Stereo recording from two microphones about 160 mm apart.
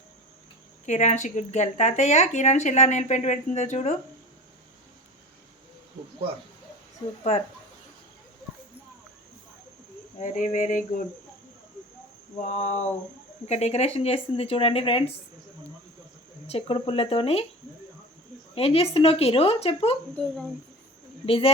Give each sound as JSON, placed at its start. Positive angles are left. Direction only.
{"t": 0.9, "sound": "speech", "side_deg": 50}
{"t": 10.2, "sound": "a sound", "side_deg": 55}
{"t": 12.4, "sound": "speech", "side_deg": 45}
{"t": 16.5, "sound": "speech", "side_deg": 35}
{"t": 18.5, "sound": "speech", "side_deg": 40}
{"t": 20.1, "sound": "speech", "side_deg": 5}
{"t": 21.2, "sound": "speech", "side_deg": 35}